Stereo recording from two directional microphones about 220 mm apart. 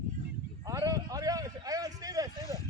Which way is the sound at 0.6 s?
15° right (ahead or behind).